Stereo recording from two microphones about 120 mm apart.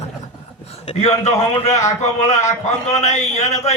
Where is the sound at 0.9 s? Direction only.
65° left (ahead or behind).